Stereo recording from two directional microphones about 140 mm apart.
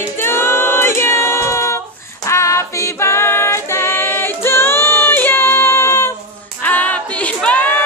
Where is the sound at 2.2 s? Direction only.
20° left (ahead or behind).